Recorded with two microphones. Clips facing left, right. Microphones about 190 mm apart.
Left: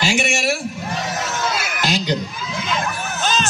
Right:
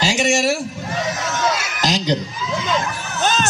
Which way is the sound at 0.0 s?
40° right (ahead or behind).